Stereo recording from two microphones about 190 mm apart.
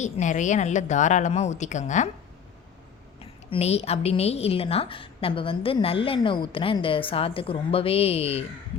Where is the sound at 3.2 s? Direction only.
30° left (ahead or behind).